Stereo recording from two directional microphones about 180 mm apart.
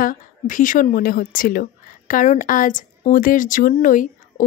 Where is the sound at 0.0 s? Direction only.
50° left (ahead or behind).